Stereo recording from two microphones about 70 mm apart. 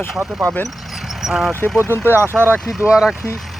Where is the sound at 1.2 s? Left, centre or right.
Centre.